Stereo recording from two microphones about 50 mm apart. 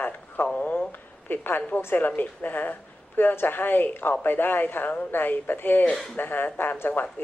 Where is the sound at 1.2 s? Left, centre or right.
Left.